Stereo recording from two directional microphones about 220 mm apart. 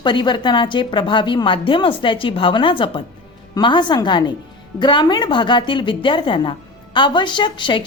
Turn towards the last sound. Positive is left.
turn(degrees=20)  # may be behind; listen again after turning